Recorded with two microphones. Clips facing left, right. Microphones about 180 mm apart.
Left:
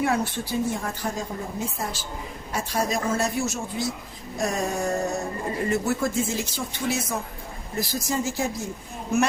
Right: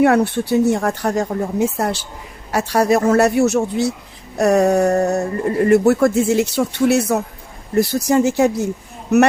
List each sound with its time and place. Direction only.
0.0 s speech: 70° right (ahead or behind)